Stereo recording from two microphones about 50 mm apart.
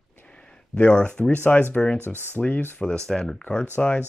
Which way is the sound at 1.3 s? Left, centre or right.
Left.